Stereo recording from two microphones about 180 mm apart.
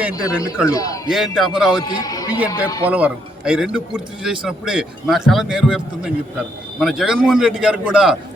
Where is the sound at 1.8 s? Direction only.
20° left (ahead or behind).